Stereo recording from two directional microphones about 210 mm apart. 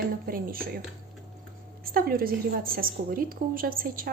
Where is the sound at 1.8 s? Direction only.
45° right (ahead or behind).